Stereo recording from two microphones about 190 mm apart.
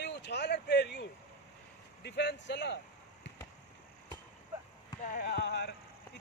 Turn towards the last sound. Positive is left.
turn(degrees=65)  # may be behind; listen again after turning